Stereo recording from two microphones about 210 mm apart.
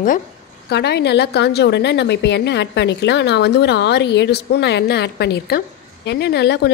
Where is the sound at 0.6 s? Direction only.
55° left (ahead or behind).